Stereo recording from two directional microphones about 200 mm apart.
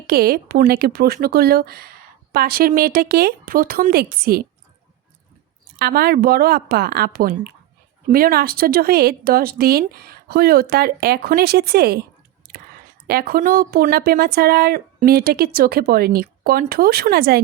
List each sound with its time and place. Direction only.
0.1 s speech: 50° right (ahead or behind)
5.8 s speech: 50° right (ahead or behind)
13.1 s speech: 50° right (ahead or behind)